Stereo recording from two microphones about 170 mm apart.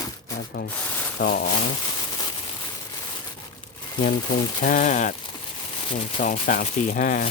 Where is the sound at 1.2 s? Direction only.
55° left (ahead or behind).